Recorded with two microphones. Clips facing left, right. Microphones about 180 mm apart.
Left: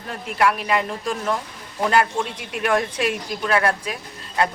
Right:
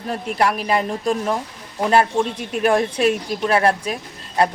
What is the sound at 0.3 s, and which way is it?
A woman's voice, 35° right (ahead or behind).